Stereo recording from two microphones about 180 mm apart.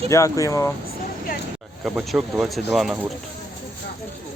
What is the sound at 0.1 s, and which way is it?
Speech, 15° left (ahead or behind).